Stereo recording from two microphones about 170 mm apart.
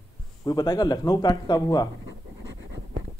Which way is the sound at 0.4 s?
25° left (ahead or behind).